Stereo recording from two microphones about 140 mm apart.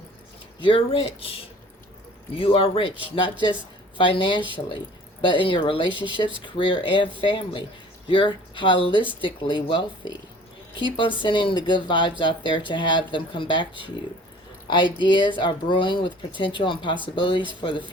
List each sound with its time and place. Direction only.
0.6 s speech: 40° left (ahead or behind)